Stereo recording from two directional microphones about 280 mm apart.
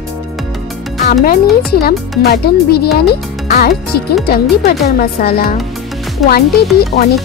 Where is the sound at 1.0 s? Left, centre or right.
Left.